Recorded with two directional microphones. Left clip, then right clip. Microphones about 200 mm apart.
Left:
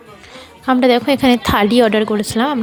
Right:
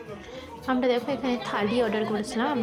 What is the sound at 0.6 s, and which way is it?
A woman's voice, 45° left (ahead or behind).